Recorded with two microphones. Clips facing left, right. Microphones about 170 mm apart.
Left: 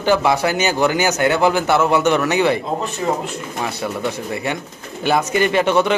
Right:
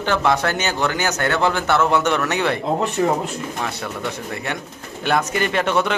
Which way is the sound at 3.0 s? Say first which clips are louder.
Right 2 dB; 55° right (ahead or behind).